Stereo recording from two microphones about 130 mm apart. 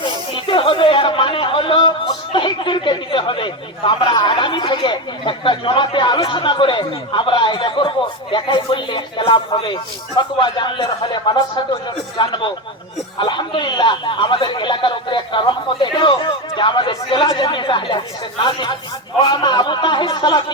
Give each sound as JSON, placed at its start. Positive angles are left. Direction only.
{"t": 0.0, "sound": "speech", "side_deg": 40}